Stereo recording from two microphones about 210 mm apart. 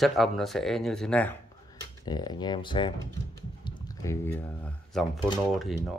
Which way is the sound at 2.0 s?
20° left (ahead or behind).